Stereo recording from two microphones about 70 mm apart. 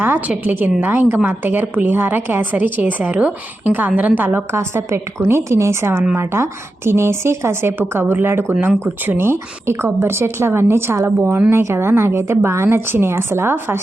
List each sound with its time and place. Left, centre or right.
0.0 s a woman's voice: right
11.3 s a woman's voice: right